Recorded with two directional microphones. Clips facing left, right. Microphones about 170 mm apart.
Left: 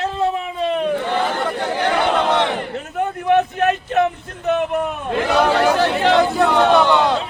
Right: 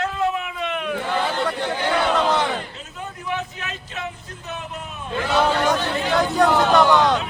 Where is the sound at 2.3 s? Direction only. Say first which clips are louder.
Left 4 dB; 65° left (ahead or behind).